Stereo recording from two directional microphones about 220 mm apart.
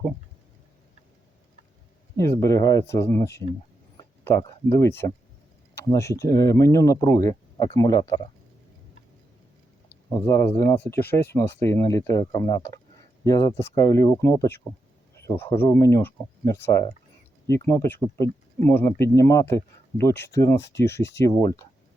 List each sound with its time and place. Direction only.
2.1 s speech: 15° left (ahead or behind)
6.1 s speech: 15° left (ahead or behind)
10.1 s speech: 15° left (ahead or behind)